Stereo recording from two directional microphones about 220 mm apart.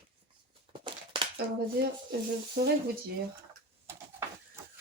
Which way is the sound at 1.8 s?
50° right (ahead or behind).